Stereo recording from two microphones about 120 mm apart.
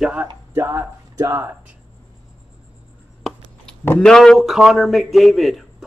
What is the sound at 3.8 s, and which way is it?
Speech, 15° left (ahead or behind).